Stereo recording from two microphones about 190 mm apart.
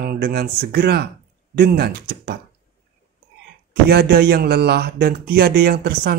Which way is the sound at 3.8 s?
55° right (ahead or behind).